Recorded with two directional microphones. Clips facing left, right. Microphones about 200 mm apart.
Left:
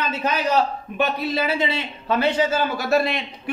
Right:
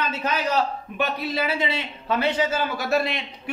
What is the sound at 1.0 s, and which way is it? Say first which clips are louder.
A man's voice: left 3 dB; 25° left (ahead or behind).